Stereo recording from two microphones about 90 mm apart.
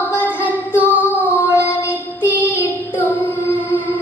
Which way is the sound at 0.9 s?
20° right (ahead or behind).